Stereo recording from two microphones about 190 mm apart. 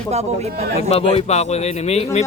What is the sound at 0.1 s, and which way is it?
Speech, 35° right (ahead or behind).